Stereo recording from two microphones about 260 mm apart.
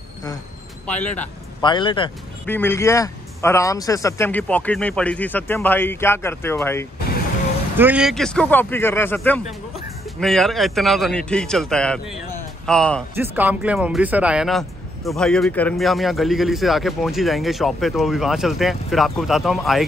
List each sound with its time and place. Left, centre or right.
0.8 s a man's voice: centre
1.6 s a man's voice: centre
7.7 s a man's voice: centre
13.1 s a man's voice: centre